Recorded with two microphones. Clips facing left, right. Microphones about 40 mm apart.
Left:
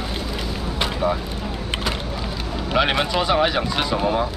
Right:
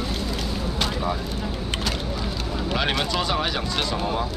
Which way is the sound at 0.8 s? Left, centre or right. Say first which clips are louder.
Left 5 dB; centre.